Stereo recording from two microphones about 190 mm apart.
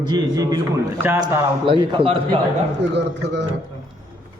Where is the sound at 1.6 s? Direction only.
25° right (ahead or behind).